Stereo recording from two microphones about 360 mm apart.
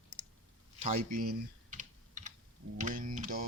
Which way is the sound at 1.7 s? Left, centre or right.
Centre.